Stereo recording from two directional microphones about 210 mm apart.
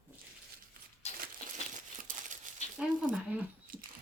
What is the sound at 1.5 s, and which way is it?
Crumpling, 35° right (ahead or behind).